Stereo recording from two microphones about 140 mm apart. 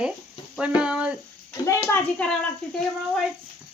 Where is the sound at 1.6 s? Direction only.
20° left (ahead or behind).